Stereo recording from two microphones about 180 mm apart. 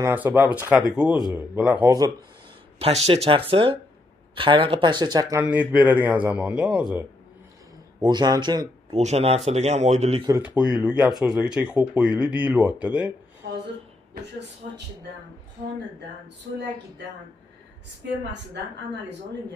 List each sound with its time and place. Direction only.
0.0 s a man's voice: 10° right (ahead or behind)
1.9 s speech: 20° right (ahead or behind)
2.8 s a man's voice: 35° right (ahead or behind); by 7.1 s 5° right (ahead or behind)
8.0 s speech: 25° right (ahead or behind)
8.9 s speech: 35° right (ahead or behind)
10.2 s a man's voice: 10° right (ahead or behind)
14.6 s speech: 45° right (ahead or behind)